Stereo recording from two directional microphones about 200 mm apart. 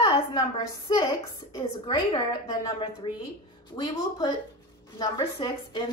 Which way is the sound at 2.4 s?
20° left (ahead or behind).